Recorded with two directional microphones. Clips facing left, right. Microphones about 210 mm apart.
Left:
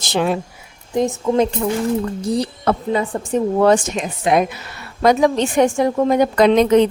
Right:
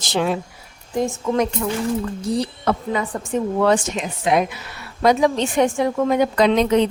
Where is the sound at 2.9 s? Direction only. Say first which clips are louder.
Left 4 dB; 25° left (ahead or behind).